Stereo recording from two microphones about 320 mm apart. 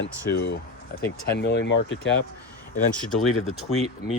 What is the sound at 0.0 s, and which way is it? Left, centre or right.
Speech, left.